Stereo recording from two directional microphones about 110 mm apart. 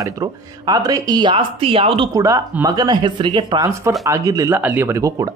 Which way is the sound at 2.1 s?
30° right (ahead or behind).